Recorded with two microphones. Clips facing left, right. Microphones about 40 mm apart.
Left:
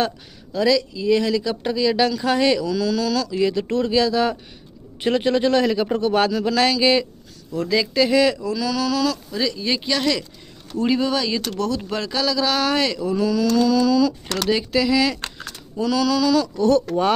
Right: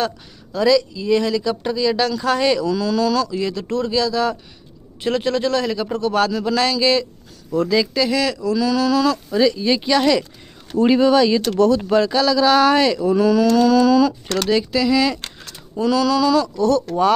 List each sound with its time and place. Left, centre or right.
0.5 s speech: centre
3.3 s a man's voice: centre
6.3 s speech: centre
7.5 s speech: centre
8.5 s speech: centre
10.8 s speech: right
11.1 s speech: centre
13.1 s a sound: right
14.4 s speech: centre
16.5 s a man's voice: centre